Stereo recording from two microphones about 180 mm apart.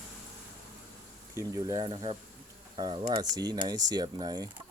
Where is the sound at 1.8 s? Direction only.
30° right (ahead or behind).